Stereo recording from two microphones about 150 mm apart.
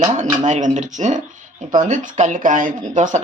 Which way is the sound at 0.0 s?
55° right (ahead or behind).